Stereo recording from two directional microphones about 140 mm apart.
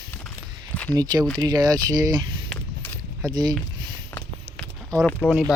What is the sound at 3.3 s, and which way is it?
Speech, 30° right (ahead or behind).